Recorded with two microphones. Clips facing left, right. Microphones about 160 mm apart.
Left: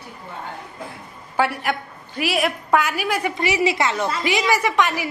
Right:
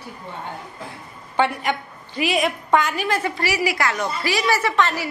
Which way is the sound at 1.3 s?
5° left (ahead or behind).